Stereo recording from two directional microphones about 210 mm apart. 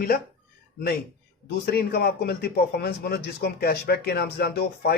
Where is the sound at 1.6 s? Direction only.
50° left (ahead or behind).